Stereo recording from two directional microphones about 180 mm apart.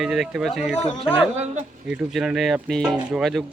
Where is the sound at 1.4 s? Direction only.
40° right (ahead or behind).